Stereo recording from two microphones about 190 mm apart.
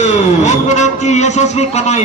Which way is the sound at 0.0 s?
40° left (ahead or behind).